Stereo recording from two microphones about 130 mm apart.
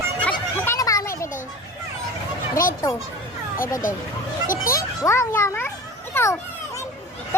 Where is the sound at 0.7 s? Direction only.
25° left (ahead or behind).